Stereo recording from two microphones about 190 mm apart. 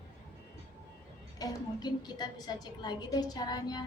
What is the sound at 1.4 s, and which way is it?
A woman's voice, 20° left (ahead or behind).